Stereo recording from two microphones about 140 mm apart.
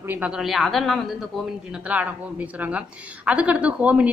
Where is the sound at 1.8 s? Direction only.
10° right (ahead or behind).